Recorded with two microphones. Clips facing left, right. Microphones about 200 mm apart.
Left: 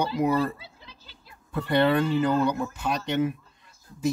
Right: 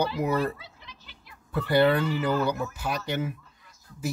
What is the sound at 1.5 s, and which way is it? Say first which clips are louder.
Speech: right 1 dB; 5° right (ahead or behind).